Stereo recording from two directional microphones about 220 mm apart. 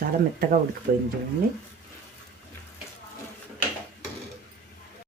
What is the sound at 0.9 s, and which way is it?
Speech, 40° right (ahead or behind).